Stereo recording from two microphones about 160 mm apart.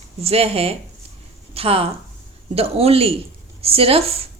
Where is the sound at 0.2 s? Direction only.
40° right (ahead or behind).